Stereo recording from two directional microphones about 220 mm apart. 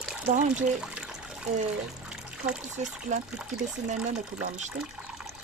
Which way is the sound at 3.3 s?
5° right (ahead or behind).